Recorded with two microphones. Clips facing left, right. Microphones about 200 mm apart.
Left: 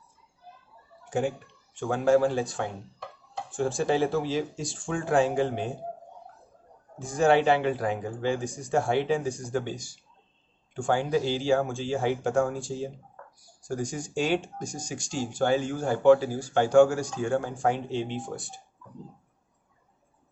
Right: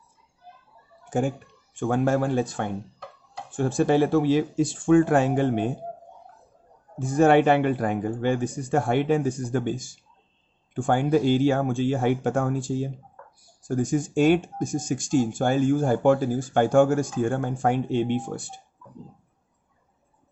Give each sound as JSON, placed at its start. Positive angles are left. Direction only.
{"t": 1.8, "sound": "speech", "side_deg": -55}
{"t": 7.2, "sound": "speech", "side_deg": -55}